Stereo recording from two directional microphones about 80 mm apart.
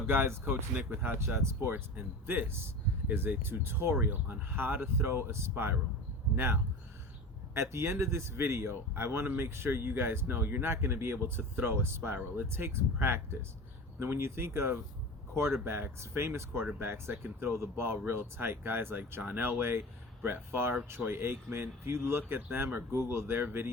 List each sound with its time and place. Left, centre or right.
0.1 s speech: right